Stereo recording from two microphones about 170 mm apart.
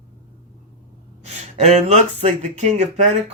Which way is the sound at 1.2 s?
40° right (ahead or behind).